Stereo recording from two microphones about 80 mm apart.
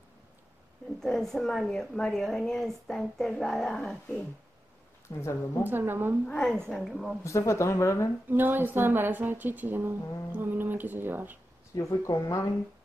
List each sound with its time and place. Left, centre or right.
1.0 s a woman's voice: centre
5.1 s speech: left
5.6 s speech: right
6.2 s a woman's voice: centre
7.2 s speech: left
8.3 s speech: right
11.7 s speech: left